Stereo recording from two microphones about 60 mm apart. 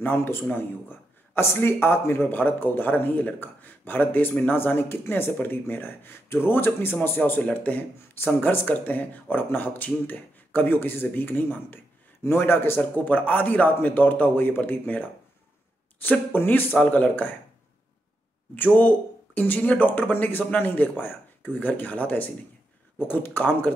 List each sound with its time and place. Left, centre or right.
0.0 s a man's voice: left
18.5 s a man's voice: left